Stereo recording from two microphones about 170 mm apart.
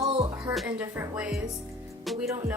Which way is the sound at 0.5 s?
Centre (ahead or behind).